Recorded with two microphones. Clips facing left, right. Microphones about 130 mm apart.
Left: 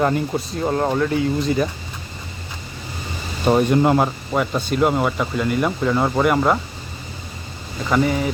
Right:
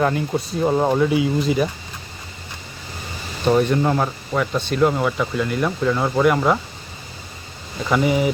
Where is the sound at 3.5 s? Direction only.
20° left (ahead or behind); by 6.6 s 5° left (ahead or behind).